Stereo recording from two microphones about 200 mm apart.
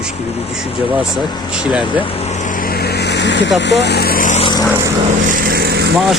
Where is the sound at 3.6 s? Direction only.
60° left (ahead or behind); by 4.4 s 40° left (ahead or behind).